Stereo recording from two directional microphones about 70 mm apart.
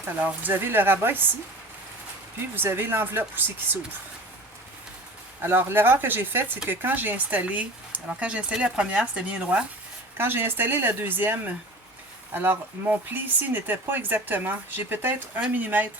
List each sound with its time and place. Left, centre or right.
0.2 s speech: right
2.6 s speech: right
5.4 s speech: right; by 9.6 s centre
10.2 s speech: right